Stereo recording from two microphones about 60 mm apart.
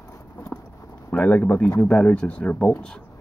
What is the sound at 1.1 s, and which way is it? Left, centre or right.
Speech, left.